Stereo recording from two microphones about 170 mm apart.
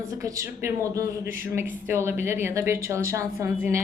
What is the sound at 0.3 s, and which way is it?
A woman's voice, 20° right (ahead or behind).